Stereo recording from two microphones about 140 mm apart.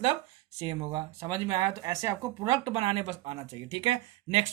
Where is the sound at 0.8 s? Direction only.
35° right (ahead or behind).